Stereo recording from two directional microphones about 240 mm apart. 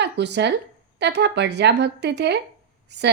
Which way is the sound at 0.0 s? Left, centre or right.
Right.